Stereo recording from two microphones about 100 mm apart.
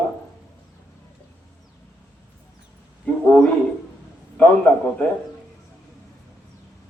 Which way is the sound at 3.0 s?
10° left (ahead or behind).